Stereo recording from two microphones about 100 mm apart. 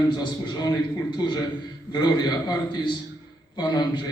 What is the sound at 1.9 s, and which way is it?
A man's voice, 45° left (ahead or behind).